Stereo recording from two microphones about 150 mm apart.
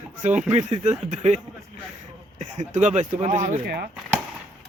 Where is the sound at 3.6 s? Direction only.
90° right.